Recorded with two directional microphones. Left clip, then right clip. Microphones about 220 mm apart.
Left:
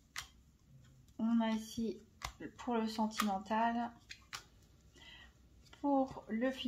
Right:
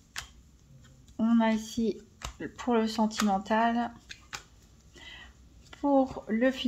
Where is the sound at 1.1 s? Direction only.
35° right (ahead or behind).